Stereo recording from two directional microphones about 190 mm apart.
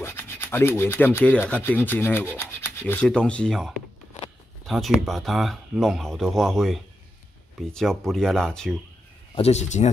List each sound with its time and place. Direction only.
0.0 s speech: 10° left (ahead or behind)
9.3 s speech: 35° left (ahead or behind)